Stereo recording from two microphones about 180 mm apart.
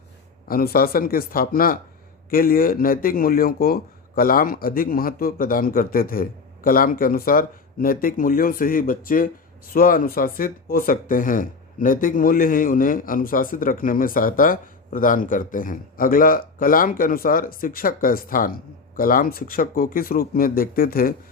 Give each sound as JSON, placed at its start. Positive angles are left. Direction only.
{"t": 0.4, "sound": "speech", "side_deg": 55}